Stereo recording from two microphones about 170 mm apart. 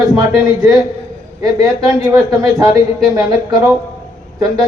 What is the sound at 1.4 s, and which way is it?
A man's voice, 20° right (ahead or behind).